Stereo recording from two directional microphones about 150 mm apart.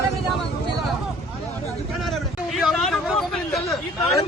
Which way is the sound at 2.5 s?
Centre (ahead or behind).